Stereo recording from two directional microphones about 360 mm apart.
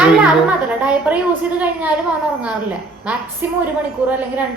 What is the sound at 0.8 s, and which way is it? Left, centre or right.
A man's voice, centre.